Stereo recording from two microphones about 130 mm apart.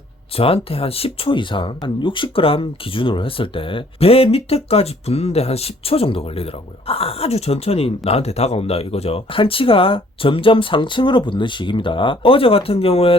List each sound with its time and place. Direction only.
0.3 s speech: 45° left (ahead or behind)